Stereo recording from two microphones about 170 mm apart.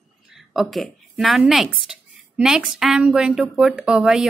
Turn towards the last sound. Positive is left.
turn(degrees=-5)  # may be behind; listen again after turning